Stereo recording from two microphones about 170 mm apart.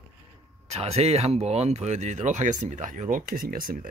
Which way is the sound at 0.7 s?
40° right (ahead or behind).